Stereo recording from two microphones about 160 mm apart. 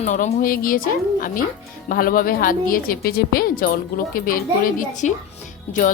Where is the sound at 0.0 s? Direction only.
50° left (ahead or behind).